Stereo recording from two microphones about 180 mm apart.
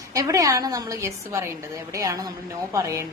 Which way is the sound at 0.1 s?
20° right (ahead or behind).